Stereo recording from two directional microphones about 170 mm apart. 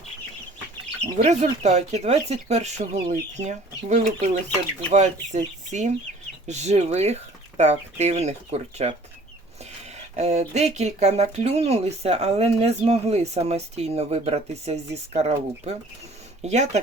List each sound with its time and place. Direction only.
1.2 s speech: 40° right (ahead or behind)
10.2 s speech: 40° right (ahead or behind)